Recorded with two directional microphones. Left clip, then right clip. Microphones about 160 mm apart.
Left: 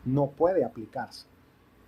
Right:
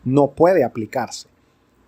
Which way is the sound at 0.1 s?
50° right (ahead or behind).